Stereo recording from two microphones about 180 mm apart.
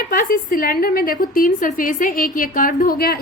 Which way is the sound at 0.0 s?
55° left (ahead or behind).